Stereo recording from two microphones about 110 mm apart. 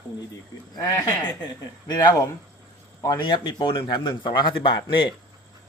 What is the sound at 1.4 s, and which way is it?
Speech, 40° left (ahead or behind).